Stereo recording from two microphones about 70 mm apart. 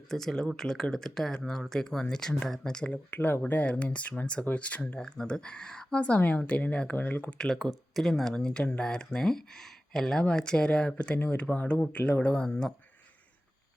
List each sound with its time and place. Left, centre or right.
0.1 s speech: centre
3.1 s speech: left
12.5 s speech: centre